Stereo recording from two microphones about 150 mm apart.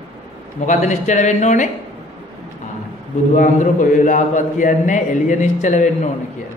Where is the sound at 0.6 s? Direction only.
55° left (ahead or behind).